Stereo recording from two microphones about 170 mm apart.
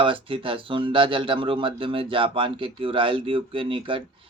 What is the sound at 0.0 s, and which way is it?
Speech, 30° right (ahead or behind).